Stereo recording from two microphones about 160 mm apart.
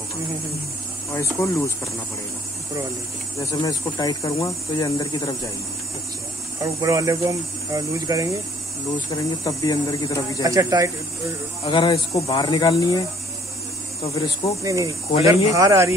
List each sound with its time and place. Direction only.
1.1 s speech: 20° left (ahead or behind)
3.3 s speech: 25° left (ahead or behind)
6.6 s speech: 20° right (ahead or behind)
8.9 s speech: 30° left (ahead or behind)
10.4 s speech: 20° right (ahead or behind)
11.6 s speech: 30° left (ahead or behind)
14.6 s speech: 20° right (ahead or behind)